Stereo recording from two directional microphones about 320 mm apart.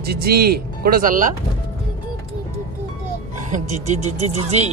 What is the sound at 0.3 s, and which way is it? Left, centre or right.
Speech, right.